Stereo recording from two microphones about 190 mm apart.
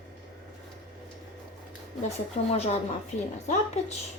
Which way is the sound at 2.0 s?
35° left (ahead or behind).